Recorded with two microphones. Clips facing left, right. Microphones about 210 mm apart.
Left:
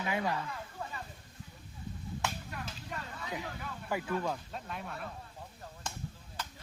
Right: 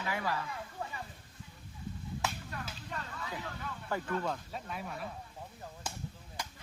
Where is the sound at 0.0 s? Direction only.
20° left (ahead or behind).